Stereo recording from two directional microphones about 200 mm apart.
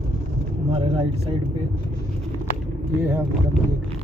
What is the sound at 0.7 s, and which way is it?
Speech, 30° right (ahead or behind).